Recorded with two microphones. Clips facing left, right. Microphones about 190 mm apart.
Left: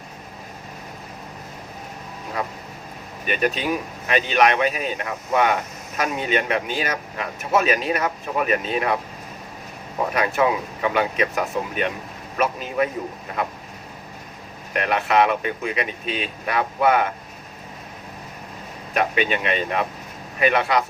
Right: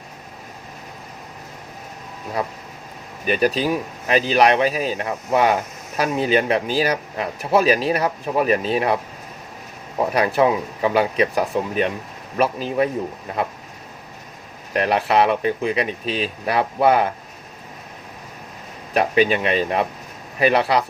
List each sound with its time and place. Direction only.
2.4 s speech: 35° right (ahead or behind)
10.2 s speech: 30° right (ahead or behind)
14.7 s speech: 35° right (ahead or behind)
18.9 s speech: 35° right (ahead or behind)